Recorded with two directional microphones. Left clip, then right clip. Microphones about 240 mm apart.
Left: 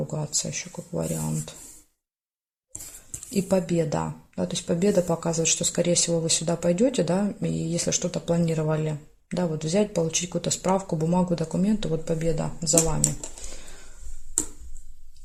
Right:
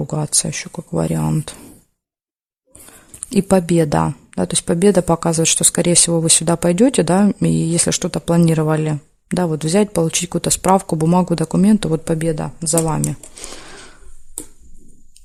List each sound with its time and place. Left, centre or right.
0.1 s speech: right
3.2 s speech: right
13.4 s a sound: right